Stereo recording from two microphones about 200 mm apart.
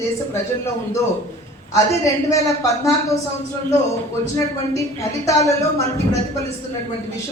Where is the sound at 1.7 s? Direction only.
15° left (ahead or behind).